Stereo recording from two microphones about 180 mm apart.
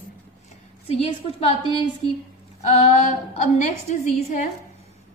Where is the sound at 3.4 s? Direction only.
40° left (ahead or behind).